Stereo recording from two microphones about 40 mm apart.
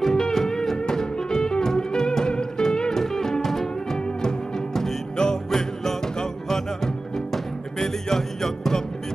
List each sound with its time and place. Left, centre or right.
0.0 s music: centre
7.8 s music: centre